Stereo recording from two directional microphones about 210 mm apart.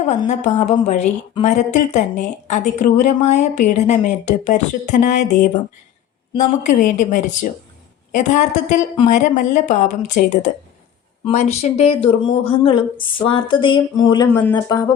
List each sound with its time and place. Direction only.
0.0 s a woman's voice: 30° left (ahead or behind)